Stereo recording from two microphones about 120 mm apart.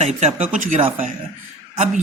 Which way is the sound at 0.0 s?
70° right (ahead or behind).